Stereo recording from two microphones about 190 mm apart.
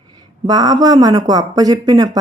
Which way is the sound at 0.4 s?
20° right (ahead or behind).